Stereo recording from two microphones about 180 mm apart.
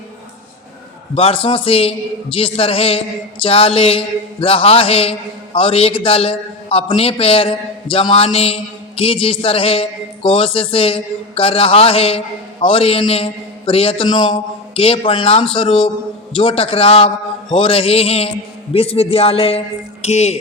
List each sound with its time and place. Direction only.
1.1 s a man's voice: 30° left (ahead or behind)